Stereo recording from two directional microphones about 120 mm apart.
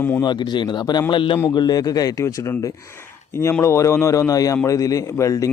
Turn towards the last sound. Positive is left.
turn(degrees=25)  # may be behind; listen again after turning